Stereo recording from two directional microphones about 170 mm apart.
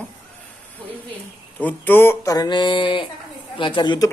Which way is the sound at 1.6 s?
10° left (ahead or behind).